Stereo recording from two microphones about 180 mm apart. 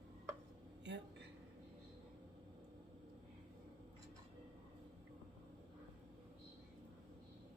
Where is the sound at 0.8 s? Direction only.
75° right (ahead or behind).